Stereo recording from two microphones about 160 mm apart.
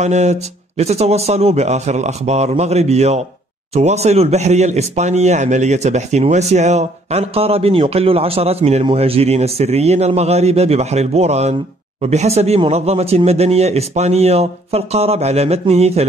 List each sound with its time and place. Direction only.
0.0 s speech: 45° right (ahead or behind)